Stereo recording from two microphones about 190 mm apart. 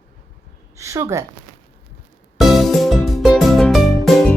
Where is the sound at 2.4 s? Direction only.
Centre (ahead or behind).